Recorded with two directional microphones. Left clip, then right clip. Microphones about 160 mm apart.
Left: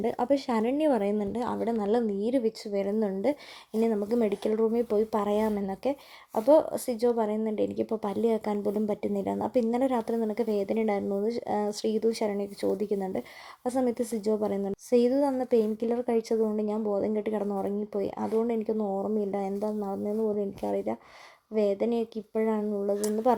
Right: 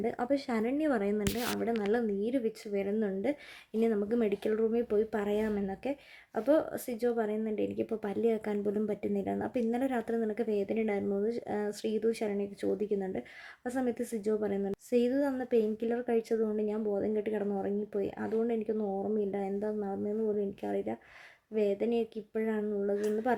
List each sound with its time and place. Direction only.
0.0 s speech: 15° left (ahead or behind)